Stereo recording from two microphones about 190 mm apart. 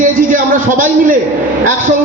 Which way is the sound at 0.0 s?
45° right (ahead or behind).